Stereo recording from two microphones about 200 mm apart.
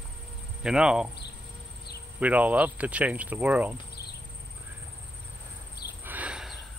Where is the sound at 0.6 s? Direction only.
5° right (ahead or behind).